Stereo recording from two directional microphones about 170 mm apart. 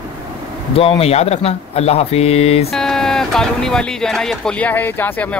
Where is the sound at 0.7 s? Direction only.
35° left (ahead or behind).